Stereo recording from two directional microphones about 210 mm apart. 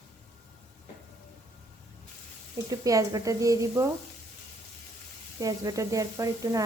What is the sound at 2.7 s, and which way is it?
Speech, 15° right (ahead or behind).